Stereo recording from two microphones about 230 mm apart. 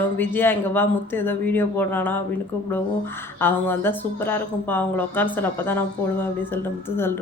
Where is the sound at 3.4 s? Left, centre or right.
Centre.